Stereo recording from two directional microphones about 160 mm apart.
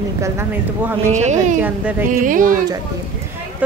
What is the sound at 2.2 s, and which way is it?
Speech, 55° right (ahead or behind).